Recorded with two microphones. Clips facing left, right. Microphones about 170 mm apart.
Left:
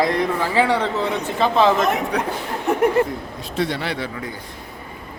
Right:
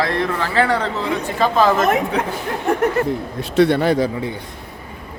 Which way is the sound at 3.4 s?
70° right (ahead or behind).